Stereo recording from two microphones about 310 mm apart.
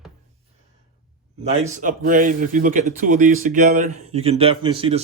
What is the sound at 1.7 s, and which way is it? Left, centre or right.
A man's voice, right.